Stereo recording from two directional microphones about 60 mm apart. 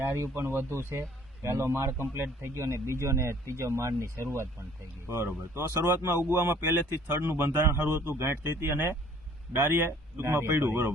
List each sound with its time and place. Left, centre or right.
0.0 s speech: right
5.5 s speech: right